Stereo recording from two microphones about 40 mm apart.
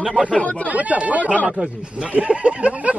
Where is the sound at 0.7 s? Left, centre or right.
Right.